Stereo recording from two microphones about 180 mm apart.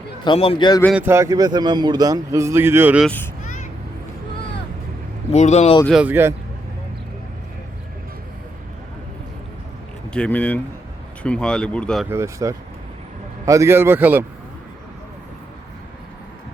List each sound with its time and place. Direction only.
0.3 s a man's voice: 30° left (ahead or behind)
0.9 s a man's voice: 15° right (ahead or behind)
3.4 s vehicle: 45° left (ahead or behind)
5.3 s speech: 40° left (ahead or behind)
5.8 s a man's voice: 5° right (ahead or behind)
10.1 s speech: 5° left (ahead or behind)
12.0 s a man's voice: 15° right (ahead or behind)